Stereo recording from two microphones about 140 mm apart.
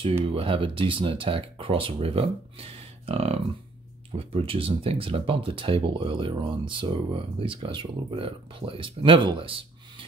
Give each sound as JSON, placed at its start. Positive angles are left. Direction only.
{"t": 0.3, "sound": "speech", "side_deg": -40}